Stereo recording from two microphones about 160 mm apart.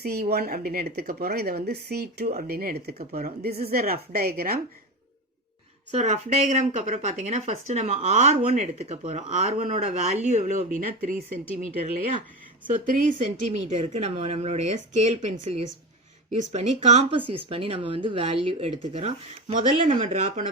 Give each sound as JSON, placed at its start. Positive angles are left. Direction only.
{"t": 0.0, "sound": "a woman's voice", "side_deg": -80}
{"t": 2.5, "sound": "a woman's voice", "side_deg": -70}
{"t": 5.9, "sound": "speech", "side_deg": -45}
{"t": 13.7, "sound": "speech", "side_deg": -40}